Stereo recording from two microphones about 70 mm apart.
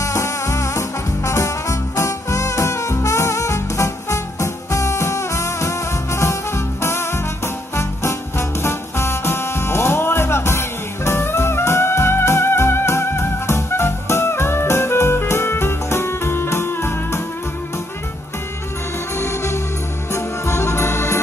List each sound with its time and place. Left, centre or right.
0.0 s music: left
19.1 s music: left